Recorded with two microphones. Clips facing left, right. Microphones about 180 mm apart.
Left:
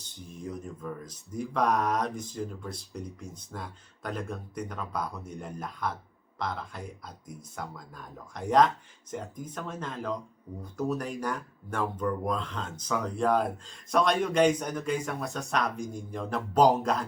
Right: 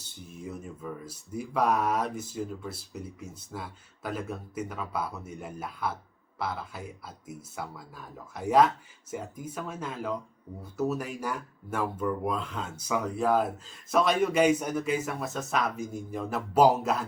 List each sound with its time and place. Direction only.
0.0 s speech: 5° right (ahead or behind)